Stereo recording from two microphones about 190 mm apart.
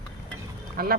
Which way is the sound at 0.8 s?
50° right (ahead or behind).